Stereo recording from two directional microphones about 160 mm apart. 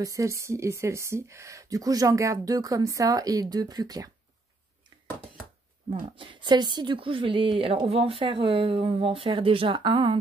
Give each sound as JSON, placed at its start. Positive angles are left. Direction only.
{"t": 0.0, "sound": "speech", "side_deg": -20}
{"t": 6.1, "sound": "speech", "side_deg": -30}